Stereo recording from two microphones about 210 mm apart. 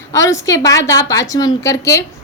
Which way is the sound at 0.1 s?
15° left (ahead or behind).